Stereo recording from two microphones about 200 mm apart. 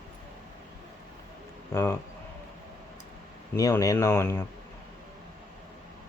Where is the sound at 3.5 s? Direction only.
15° left (ahead or behind).